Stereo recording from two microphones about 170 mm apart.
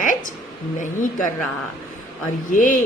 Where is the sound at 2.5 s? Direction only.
50° left (ahead or behind).